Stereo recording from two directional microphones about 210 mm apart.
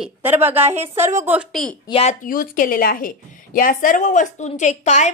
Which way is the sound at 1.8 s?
25° left (ahead or behind).